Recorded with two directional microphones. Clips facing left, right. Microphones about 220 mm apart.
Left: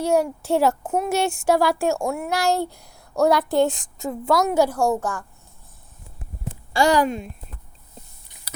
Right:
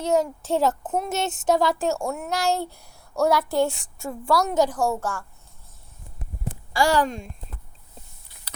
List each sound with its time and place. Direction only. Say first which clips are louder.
0.0 s a woman's voice: left 2 dB; 10° left (ahead or behind)
6.7 s speech: left 3 dB; 20° left (ahead or behind)
7.0 s speech: left 3 dB; 5° left (ahead or behind)